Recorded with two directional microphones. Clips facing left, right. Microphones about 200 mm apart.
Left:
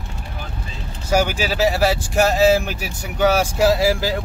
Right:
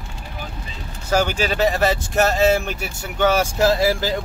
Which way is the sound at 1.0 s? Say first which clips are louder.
Left 1 dB; 10° left (ahead or behind).